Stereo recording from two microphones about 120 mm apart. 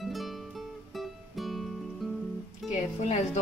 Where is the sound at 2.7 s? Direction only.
70° left (ahead or behind).